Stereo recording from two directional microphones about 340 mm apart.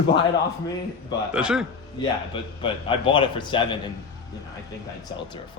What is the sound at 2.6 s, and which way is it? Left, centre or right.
A man's voice, centre.